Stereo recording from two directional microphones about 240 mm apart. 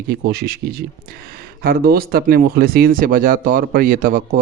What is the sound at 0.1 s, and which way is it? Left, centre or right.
Speech, right.